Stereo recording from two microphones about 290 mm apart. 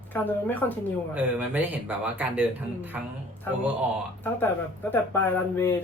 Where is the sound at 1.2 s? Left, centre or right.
Centre.